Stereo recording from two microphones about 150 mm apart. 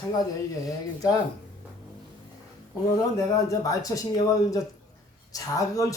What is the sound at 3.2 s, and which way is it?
Speech, 25° left (ahead or behind).